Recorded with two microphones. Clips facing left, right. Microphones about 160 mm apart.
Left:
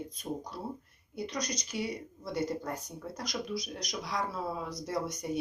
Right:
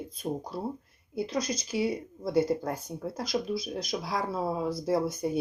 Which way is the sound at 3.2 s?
30° right (ahead or behind).